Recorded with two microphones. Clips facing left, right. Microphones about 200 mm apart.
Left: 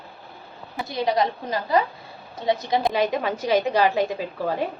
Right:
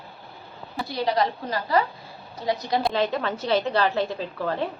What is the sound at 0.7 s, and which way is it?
A woman's voice, 20° left (ahead or behind).